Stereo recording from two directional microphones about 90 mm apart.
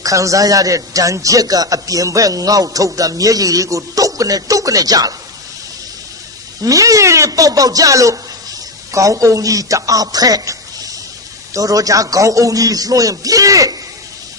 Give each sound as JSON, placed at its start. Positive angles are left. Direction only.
{"t": 0.0, "sound": "a man's voice", "side_deg": -35}
{"t": 6.6, "sound": "a man's voice", "side_deg": -40}